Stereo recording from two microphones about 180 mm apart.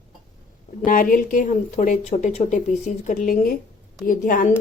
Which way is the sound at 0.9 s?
50° left (ahead or behind).